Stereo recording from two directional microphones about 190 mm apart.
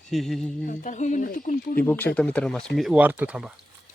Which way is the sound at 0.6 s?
40° left (ahead or behind).